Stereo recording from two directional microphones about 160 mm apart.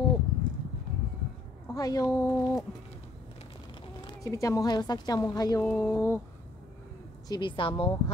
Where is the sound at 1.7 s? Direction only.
25° left (ahead or behind).